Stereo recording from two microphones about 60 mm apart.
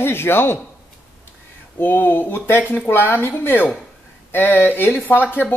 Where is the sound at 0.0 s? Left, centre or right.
Left.